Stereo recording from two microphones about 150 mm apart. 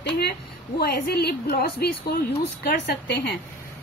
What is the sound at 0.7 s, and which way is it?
A woman's voice, 90° left.